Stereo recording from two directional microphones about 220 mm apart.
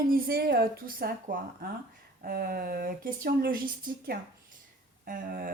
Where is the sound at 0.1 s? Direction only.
45° right (ahead or behind).